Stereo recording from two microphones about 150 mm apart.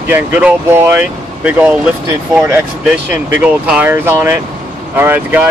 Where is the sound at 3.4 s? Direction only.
10° right (ahead or behind).